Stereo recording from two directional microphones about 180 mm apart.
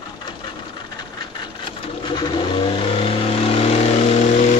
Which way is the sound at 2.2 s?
30° left (ahead or behind).